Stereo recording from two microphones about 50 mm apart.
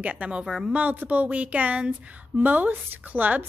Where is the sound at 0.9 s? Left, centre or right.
Right.